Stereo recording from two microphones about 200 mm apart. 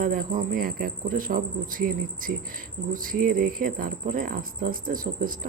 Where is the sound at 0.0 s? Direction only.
45° right (ahead or behind).